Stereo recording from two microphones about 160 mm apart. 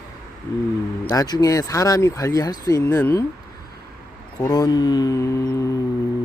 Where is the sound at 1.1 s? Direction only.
25° left (ahead or behind).